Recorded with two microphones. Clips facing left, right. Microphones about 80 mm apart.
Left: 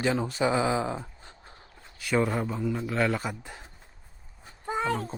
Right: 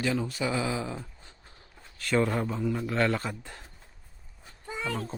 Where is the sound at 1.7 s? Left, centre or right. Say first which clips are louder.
Even; centre.